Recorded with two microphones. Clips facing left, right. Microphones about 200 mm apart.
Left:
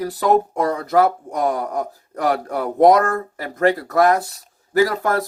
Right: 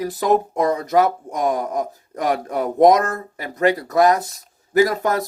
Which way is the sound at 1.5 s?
45° right (ahead or behind).